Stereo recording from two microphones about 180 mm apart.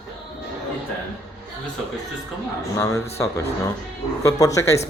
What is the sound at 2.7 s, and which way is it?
Speech, 15° left (ahead or behind).